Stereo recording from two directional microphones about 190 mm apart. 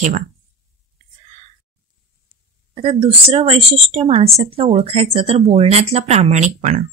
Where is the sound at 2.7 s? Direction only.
30° right (ahead or behind).